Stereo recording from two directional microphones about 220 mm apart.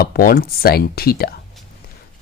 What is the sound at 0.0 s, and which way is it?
Speech, 40° left (ahead or behind).